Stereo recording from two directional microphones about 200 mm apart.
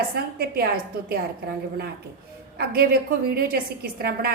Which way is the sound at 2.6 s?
50° right (ahead or behind).